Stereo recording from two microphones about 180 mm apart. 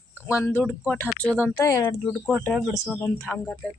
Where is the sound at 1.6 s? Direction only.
20° left (ahead or behind).